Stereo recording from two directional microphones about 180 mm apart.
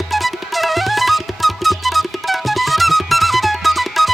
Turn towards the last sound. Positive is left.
turn(degrees=0)  # may be behind; listen again after turning